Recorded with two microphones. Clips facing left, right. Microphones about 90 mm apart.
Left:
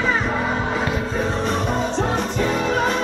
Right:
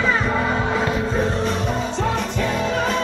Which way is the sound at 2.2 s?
25° left (ahead or behind).